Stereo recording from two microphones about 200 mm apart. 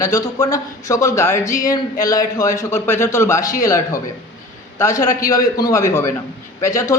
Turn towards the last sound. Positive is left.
turn(degrees=15)  # may be behind; listen again after turning